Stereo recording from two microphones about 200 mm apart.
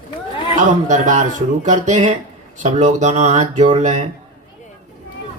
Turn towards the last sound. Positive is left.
turn(degrees=-35)  # may be behind; listen again after turning